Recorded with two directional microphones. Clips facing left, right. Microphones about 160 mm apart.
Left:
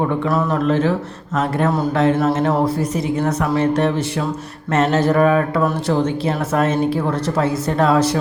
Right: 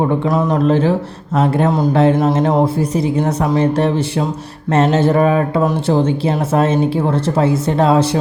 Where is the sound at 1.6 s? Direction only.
15° right (ahead or behind).